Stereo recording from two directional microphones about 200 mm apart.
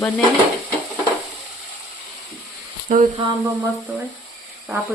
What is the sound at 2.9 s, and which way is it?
Speech, 40° right (ahead or behind).